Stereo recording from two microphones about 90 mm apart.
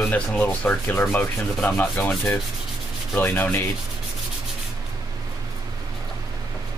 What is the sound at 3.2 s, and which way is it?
Rub, 20° left (ahead or behind).